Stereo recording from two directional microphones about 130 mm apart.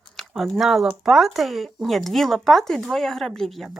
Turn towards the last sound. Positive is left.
turn(degrees=0)  # may be behind; listen again after turning